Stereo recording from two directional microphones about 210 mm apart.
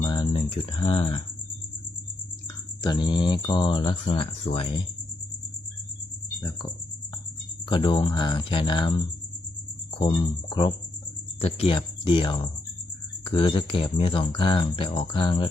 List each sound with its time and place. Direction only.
0.0 s speech: 20° left (ahead or behind)
2.8 s speech: 20° left (ahead or behind)
7.7 s speech: 20° left (ahead or behind)
10.5 s speech: 20° left (ahead or behind)